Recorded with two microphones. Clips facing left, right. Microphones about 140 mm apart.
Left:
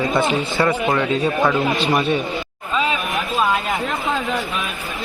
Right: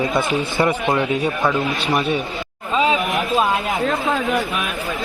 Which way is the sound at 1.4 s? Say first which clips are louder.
Left 2 dB; centre (ahead or behind).